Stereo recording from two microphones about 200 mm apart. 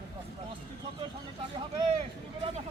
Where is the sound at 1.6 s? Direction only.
25° right (ahead or behind).